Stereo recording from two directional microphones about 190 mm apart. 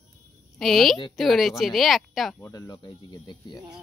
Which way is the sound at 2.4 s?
20° left (ahead or behind).